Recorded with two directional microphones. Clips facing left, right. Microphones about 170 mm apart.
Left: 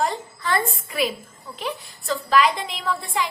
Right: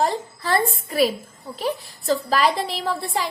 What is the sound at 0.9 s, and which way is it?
A woman's voice, 35° right (ahead or behind).